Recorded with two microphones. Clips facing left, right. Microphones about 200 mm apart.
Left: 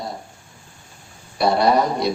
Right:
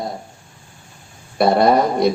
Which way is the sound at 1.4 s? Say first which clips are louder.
Right 3 dB; 55° right (ahead or behind).